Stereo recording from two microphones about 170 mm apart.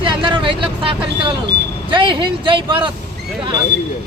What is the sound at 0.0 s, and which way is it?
Vehicle, 30° right (ahead or behind).